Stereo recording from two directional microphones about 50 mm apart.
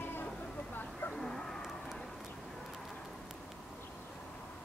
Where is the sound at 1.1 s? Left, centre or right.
Centre.